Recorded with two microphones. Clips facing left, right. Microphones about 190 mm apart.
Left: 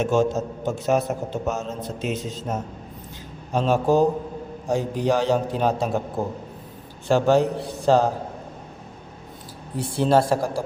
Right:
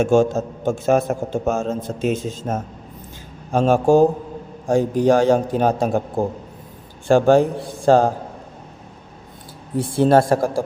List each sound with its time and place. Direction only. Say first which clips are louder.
0.0 s a man's voice: right 5 dB; 50° right (ahead or behind)
7.1 s a man's voice: right 4 dB; 50° right (ahead or behind)
9.7 s a man's voice: right 4 dB; 50° right (ahead or behind)